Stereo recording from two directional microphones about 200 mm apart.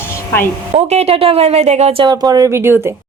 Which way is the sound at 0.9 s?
30° right (ahead or behind).